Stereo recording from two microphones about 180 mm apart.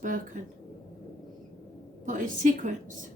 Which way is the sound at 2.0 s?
45° right (ahead or behind).